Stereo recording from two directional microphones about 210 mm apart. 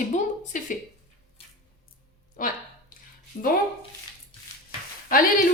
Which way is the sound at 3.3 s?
30° left (ahead or behind).